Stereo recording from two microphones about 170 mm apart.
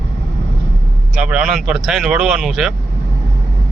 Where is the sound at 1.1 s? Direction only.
5° right (ahead or behind).